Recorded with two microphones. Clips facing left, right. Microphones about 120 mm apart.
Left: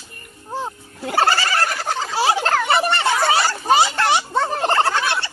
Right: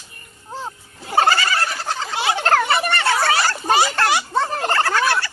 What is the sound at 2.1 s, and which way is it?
Turkey, 35° left (ahead or behind).